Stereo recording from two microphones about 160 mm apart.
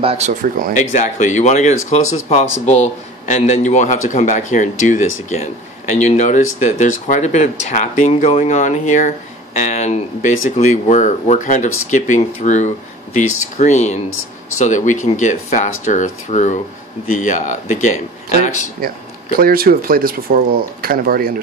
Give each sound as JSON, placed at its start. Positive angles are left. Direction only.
{"t": 0.0, "sound": "speech", "side_deg": -40}
{"t": 0.3, "sound": "speech", "side_deg": -60}
{"t": 0.7, "sound": "speech", "side_deg": 50}
{"t": 19.3, "sound": "speech", "side_deg": -65}